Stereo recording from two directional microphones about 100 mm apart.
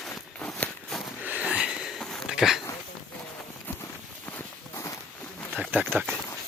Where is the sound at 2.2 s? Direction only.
5° right (ahead or behind).